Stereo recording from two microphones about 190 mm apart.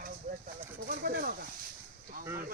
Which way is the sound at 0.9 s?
50° right (ahead or behind).